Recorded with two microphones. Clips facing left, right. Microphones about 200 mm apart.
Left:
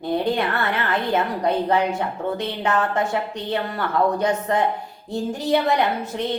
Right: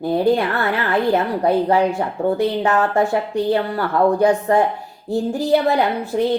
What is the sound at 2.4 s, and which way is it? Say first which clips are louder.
Speech: right 4 dB; 35° right (ahead or behind).